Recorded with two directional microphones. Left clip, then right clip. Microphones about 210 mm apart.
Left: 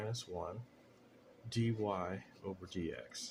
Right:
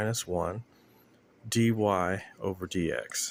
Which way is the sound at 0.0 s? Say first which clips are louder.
Right 12 dB; 60° right (ahead or behind).